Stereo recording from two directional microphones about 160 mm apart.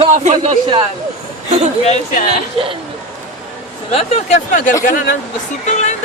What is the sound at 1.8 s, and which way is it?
Speech, 45° left (ahead or behind).